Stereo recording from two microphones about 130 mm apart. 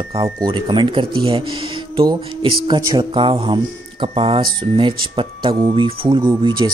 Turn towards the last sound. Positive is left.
turn(degrees=-35)  # may be behind; listen again after turning